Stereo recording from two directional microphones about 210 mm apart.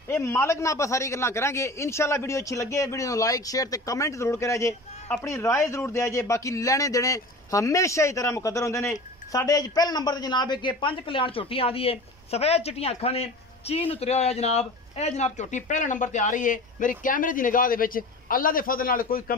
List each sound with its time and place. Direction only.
0.1 s a man's voice: 10° left (ahead or behind); by 19.3 s 45° left (ahead or behind)